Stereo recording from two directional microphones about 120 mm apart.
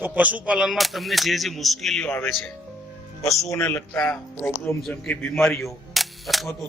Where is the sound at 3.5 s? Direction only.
20° left (ahead or behind).